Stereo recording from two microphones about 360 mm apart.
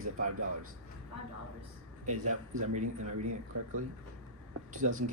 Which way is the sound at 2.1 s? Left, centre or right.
Right.